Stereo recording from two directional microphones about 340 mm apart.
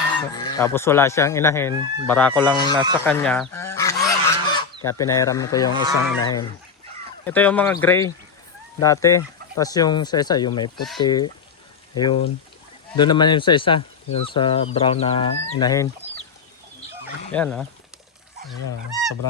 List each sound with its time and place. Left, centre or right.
0.3 s speech: centre
2.7 s speech: centre
3.0 s goose: centre
6.1 s speech: centre
17.3 s speech: centre